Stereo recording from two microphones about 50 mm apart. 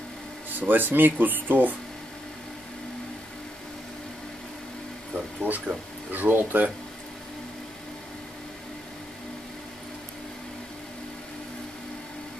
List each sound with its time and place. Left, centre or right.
0.5 s speech: right
5.4 s speech: right